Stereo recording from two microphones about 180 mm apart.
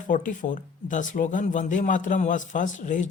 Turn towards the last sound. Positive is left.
turn(degrees=45)  # may be behind; listen again after turning